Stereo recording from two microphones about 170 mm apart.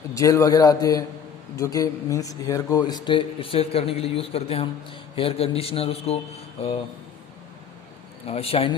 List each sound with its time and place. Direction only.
0.1 s a man's voice: 20° left (ahead or behind); by 6.7 s 35° left (ahead or behind)
8.3 s speech: 35° left (ahead or behind)